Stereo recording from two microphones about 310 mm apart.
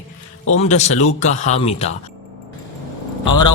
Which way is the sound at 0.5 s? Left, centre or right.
Left.